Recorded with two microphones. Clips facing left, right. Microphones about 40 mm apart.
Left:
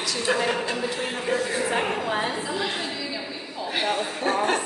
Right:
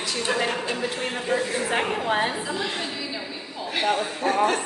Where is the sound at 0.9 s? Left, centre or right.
Centre.